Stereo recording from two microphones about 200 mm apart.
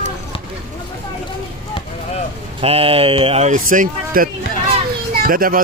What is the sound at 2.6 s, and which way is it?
Speech, 30° right (ahead or behind).